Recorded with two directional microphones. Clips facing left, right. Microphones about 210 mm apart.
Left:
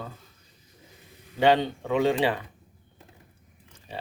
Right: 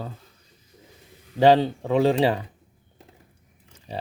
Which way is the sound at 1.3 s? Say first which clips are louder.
Right 4 dB; 35° right (ahead or behind).